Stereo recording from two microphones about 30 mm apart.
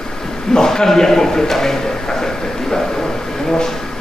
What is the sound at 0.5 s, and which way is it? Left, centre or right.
A man's voice, centre.